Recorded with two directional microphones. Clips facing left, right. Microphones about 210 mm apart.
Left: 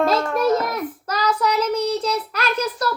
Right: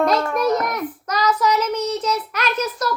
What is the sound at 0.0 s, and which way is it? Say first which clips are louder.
Child singing: even; 25° left (ahead or behind).